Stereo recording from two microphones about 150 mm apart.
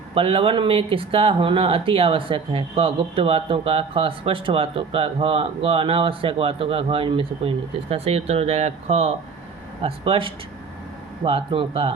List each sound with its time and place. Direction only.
0.1 s speech: 35° right (ahead or behind)